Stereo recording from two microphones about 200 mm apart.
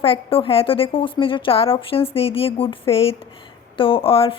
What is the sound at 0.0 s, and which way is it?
A woman's voice, 25° left (ahead or behind).